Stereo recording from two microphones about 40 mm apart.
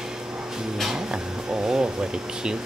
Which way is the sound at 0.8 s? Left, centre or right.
Centre.